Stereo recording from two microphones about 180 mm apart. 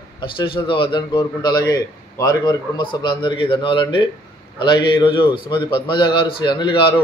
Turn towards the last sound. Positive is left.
turn(degrees=25)  # may be behind; listen again after turning